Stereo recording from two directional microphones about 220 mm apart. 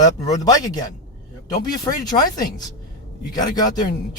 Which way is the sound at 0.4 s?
15° left (ahead or behind).